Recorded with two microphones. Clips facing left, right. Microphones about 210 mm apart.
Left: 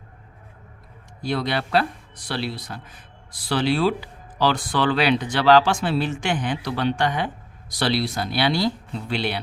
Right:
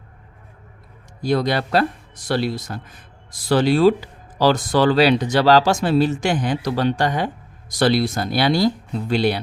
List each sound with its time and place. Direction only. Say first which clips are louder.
1.2 s speech: right 5 dB; 40° right (ahead or behind)